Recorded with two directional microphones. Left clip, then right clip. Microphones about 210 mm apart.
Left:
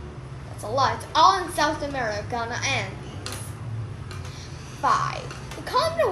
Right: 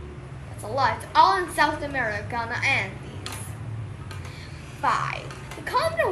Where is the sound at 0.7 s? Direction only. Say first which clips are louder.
Right 1 dB; 15° left (ahead or behind).